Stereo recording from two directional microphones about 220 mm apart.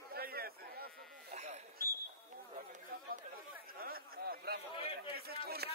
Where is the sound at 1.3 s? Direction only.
30° right (ahead or behind).